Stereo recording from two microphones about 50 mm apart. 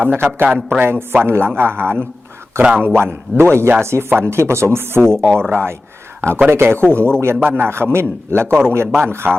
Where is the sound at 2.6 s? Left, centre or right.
Right.